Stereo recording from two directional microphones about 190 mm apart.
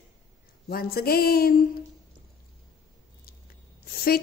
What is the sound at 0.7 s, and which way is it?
Speech, 50° left (ahead or behind).